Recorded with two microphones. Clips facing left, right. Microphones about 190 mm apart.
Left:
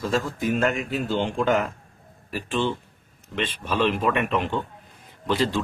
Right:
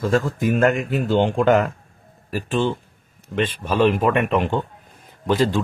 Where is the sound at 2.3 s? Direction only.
45° right (ahead or behind).